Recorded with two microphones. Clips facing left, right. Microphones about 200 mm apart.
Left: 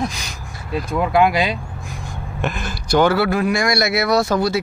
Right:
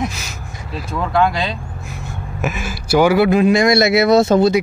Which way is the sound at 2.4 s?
5° right (ahead or behind).